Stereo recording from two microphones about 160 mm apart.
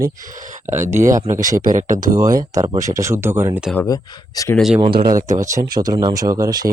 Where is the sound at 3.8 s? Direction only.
20° left (ahead or behind).